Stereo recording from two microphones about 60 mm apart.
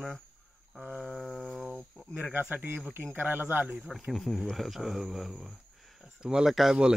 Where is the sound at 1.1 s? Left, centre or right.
Centre.